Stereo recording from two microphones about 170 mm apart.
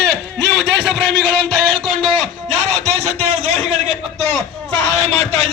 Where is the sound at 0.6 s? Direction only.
90° right.